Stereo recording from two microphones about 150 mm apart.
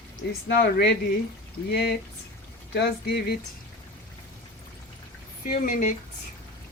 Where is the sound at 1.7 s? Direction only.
90° left.